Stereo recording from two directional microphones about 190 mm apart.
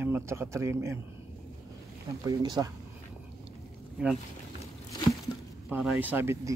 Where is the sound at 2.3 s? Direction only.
20° right (ahead or behind).